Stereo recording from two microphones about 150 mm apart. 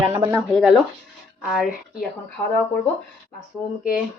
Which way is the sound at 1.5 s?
Centre (ahead or behind).